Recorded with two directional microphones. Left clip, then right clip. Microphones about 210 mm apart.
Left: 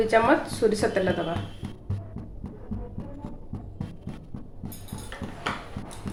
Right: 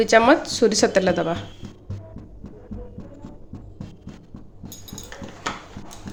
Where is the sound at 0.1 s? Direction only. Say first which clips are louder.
Right 6 dB; 50° right (ahead or behind).